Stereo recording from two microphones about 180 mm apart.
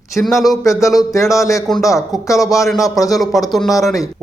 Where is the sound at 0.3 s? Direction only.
Centre (ahead or behind).